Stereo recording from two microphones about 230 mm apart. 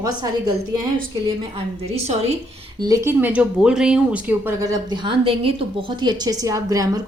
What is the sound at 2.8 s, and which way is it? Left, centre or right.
A woman's voice, centre.